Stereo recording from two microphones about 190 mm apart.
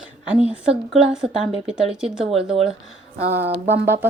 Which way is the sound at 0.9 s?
5° right (ahead or behind).